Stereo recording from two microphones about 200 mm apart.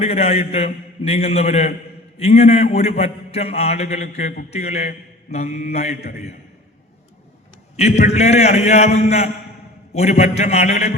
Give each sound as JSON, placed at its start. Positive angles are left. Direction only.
{"t": 0.0, "sound": "a man's voice", "side_deg": 30}
{"t": 7.8, "sound": "a man's voice", "side_deg": 35}